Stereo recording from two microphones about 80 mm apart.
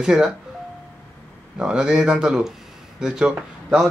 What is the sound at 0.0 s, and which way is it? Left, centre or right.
Speech, centre.